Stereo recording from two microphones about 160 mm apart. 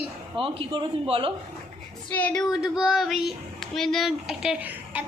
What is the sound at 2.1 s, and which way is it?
Speech, 10° left (ahead or behind).